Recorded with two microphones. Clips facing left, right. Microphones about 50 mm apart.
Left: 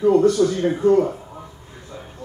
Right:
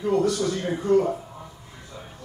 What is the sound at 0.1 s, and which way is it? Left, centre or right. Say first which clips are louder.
Speech: left 4 dB; left.